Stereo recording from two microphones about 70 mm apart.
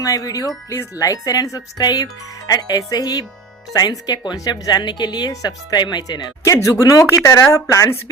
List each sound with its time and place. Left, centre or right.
0.0 s speech: left
4.4 s speech: left
6.5 s speech: left